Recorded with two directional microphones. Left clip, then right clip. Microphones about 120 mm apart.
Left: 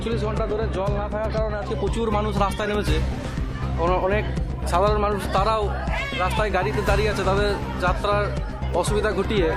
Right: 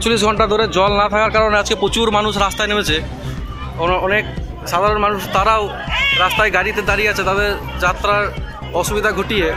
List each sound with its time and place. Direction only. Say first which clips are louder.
0.0 s speech: right 11 dB; 30° right (ahead or behind)
0.3 s speech: right 11 dB; 40° right (ahead or behind)
1.8 s speech: right 9 dB; 5° right (ahead or behind)